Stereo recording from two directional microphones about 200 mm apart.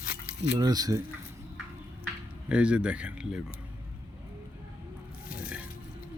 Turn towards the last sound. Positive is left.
turn(degrees=-5)  # may be behind; listen again after turning